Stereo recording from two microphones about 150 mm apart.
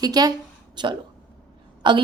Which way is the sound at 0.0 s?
25° right (ahead or behind).